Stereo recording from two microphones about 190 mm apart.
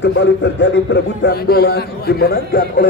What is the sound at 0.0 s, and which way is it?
Speech, 65° left (ahead or behind).